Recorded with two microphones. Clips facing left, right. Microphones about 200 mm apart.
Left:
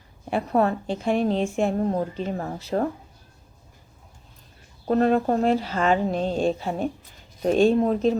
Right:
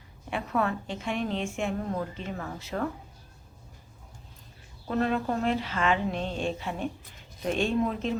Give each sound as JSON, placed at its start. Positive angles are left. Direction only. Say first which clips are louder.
{"t": 0.3, "sound": "a woman's voice", "louder": "left 7 dB", "side_deg": 35}
{"t": 4.9, "sound": "a woman's voice", "louder": "left 7 dB", "side_deg": 40}